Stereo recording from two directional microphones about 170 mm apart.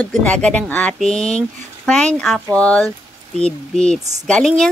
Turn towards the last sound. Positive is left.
turn(degrees=5)  # may be behind; listen again after turning